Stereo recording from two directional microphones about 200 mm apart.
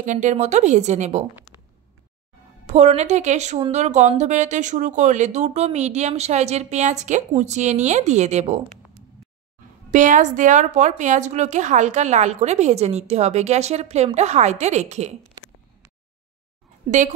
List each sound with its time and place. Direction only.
0.0 s a woman's voice: 40° right (ahead or behind)
2.6 s a woman's voice: 35° right (ahead or behind)
9.8 s a woman's voice: 40° right (ahead or behind)